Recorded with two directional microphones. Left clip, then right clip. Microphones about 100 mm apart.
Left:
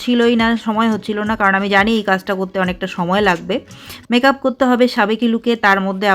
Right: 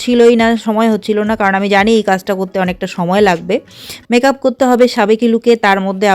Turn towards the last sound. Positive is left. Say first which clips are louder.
# right 2 dB
turn(degrees=-50)  # may be behind; listen again after turning